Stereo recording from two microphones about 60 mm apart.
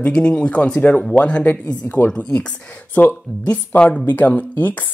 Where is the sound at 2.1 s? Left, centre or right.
Centre.